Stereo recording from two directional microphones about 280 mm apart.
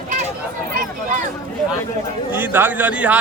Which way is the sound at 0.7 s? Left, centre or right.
Right.